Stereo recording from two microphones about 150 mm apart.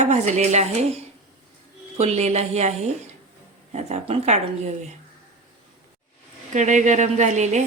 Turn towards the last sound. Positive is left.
turn(degrees=-50)  # may be behind; listen again after turning